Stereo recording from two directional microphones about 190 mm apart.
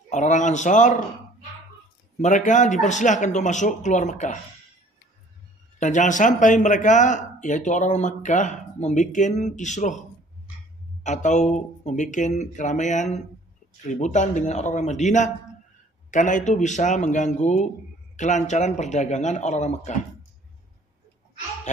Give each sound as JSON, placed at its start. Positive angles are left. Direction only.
{"t": 0.1, "sound": "speech", "side_deg": 40}
{"t": 2.1, "sound": "speech", "side_deg": 40}
{"t": 5.8, "sound": "speech", "side_deg": 40}
{"t": 11.1, "sound": "speech", "side_deg": 40}